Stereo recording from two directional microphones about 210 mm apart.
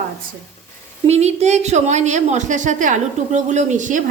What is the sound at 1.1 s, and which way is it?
A woman's voice, 30° right (ahead or behind).